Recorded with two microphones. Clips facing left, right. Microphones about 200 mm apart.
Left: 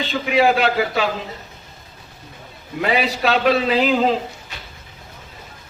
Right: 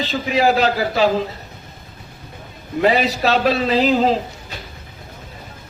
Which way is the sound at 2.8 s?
40° right (ahead or behind).